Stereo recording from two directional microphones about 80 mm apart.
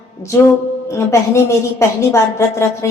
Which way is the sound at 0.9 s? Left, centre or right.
Left.